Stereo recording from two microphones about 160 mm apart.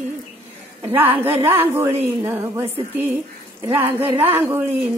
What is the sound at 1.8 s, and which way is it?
A woman's voice, 15° right (ahead or behind).